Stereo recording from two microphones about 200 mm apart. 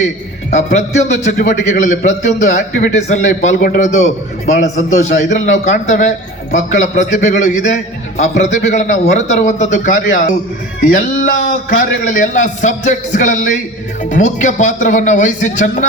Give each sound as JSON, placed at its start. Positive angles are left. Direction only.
{"t": 0.5, "sound": "a man's voice", "side_deg": 35}
{"t": 10.8, "sound": "music", "side_deg": 45}
{"t": 11.8, "sound": "a man's voice", "side_deg": 40}